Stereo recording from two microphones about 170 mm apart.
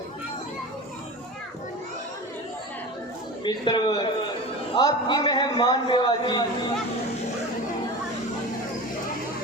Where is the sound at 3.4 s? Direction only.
30° left (ahead or behind).